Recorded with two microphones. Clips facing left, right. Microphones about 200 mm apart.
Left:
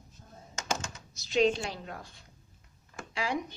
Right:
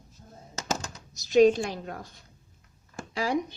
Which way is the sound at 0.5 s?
35° right (ahead or behind).